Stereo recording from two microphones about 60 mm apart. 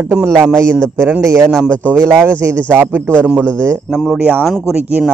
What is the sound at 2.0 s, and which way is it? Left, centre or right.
A man's voice, right.